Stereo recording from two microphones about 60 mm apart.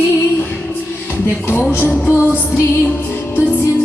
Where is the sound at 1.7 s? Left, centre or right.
Left.